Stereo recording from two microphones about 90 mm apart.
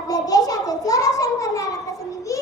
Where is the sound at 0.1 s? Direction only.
45° left (ahead or behind).